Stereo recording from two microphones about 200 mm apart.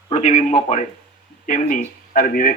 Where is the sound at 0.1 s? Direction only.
35° left (ahead or behind).